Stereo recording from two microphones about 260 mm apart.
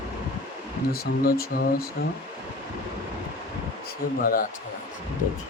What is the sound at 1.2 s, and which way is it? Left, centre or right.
Speech, left.